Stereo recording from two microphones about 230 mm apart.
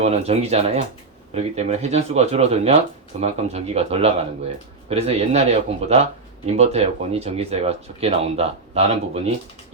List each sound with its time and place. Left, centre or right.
0.0 s speech: right